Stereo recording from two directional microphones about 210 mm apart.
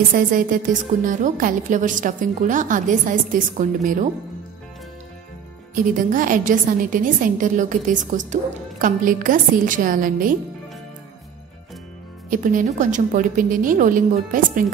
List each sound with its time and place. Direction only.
0.1 s a woman's voice: 40° right (ahead or behind)
5.8 s a woman's voice: 40° right (ahead or behind)
12.3 s a woman's voice: 40° right (ahead or behind)